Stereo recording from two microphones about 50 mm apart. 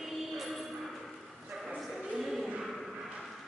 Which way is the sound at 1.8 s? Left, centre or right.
Centre.